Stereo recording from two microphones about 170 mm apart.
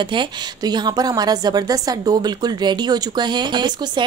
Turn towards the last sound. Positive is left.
turn(degrees=-25)  # may be behind; listen again after turning